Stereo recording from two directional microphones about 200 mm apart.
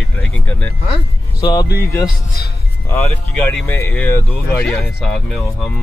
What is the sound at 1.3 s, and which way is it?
Speech, 20° left (ahead or behind).